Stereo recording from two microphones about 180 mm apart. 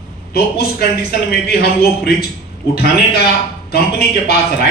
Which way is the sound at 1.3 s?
60° left (ahead or behind).